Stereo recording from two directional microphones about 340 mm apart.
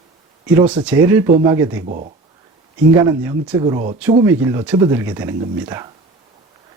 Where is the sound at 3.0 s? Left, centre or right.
Centre.